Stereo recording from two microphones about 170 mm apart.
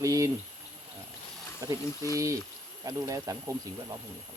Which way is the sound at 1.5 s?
20° right (ahead or behind).